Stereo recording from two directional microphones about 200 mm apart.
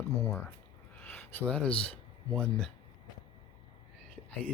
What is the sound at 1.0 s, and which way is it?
Speech, 10° left (ahead or behind).